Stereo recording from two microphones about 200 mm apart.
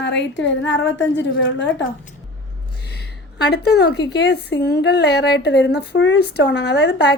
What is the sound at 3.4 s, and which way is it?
A woman's voice, 55° left (ahead or behind).